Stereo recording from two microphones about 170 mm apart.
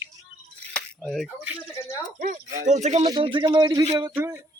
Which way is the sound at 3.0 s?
25° right (ahead or behind).